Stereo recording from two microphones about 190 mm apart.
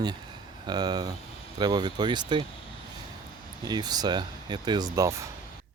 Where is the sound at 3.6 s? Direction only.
20° right (ahead or behind).